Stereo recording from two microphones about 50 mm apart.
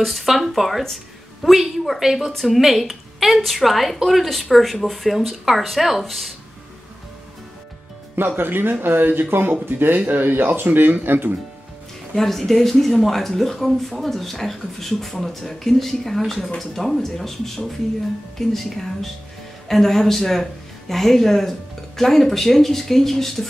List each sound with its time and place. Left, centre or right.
0.0 s speech: centre
8.2 s speech: right
12.2 s speech: centre